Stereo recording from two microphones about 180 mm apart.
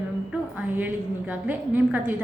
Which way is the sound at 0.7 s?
10° right (ahead or behind).